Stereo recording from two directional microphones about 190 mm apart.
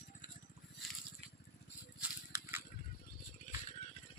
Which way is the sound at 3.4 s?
40° left (ahead or behind).